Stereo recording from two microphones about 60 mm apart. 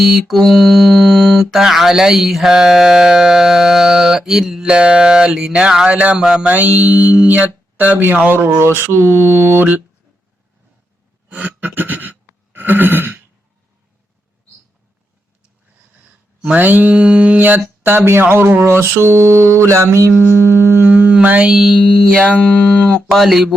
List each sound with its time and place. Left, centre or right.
0.0 s music: centre; by 6.2 s right
6.4 s speech: right
8.5 s mantra: right
11.3 s a sound: right
16.0 s a sound: right
16.9 s speech: centre
17.4 s speech: right
18.6 s mantra: right
20.8 s speech: right
21.5 s speech: centre
21.9 s speech: centre
23.1 s speech: centre